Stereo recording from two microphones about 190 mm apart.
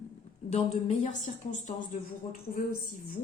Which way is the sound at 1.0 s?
40° left (ahead or behind).